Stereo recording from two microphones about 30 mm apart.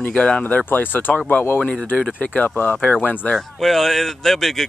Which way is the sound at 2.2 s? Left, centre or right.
Left.